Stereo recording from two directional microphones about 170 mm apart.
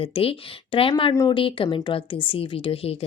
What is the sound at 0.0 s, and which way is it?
Speech, 35° left (ahead or behind).